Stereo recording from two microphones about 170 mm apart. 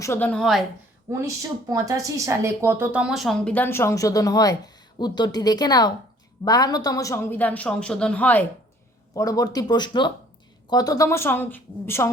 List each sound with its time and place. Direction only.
0.0 s speech: 15° left (ahead or behind)
1.2 s speech: 20° right (ahead or behind); by 8.4 s 10° left (ahead or behind)
9.1 s speech: 20° left (ahead or behind)